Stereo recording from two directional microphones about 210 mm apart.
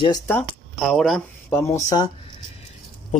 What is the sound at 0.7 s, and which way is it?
Speech, centre (ahead or behind).